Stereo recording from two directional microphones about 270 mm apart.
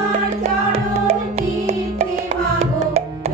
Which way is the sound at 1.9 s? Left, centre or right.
Right.